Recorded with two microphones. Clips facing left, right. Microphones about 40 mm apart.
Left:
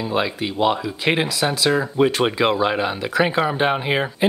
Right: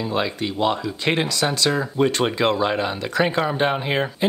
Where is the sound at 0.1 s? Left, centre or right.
Centre.